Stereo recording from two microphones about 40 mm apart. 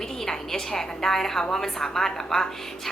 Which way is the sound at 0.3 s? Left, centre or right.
Centre.